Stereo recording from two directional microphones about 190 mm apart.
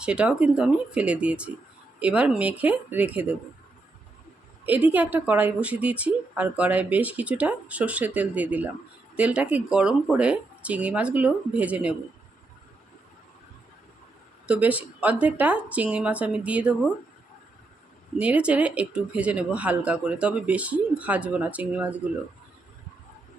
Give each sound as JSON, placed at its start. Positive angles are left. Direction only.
{"t": 0.0, "sound": "speech", "side_deg": -5}
{"t": 4.6, "sound": "speech", "side_deg": -10}
{"t": 14.4, "sound": "speech", "side_deg": -5}
{"t": 18.2, "sound": "speech", "side_deg": -5}